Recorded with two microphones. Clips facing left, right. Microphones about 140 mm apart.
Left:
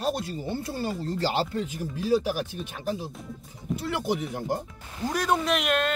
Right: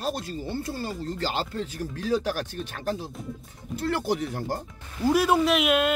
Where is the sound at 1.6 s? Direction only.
10° left (ahead or behind).